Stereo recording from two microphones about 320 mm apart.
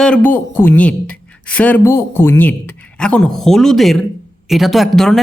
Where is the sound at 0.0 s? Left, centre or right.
Centre.